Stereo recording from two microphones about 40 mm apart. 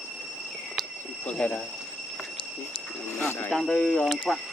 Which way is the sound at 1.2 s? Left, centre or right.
Left.